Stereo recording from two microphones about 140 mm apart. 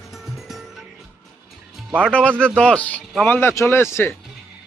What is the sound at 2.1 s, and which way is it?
Speech, 10° left (ahead or behind).